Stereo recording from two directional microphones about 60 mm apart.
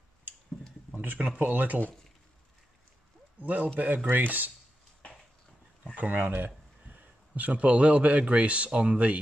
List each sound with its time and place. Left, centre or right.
0.9 s speech: right
3.3 s speech: right
5.9 s speech: right